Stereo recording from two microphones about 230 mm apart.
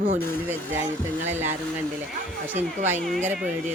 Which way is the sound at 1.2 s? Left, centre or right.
Centre.